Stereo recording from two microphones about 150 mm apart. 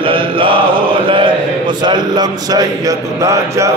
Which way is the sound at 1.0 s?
35° right (ahead or behind).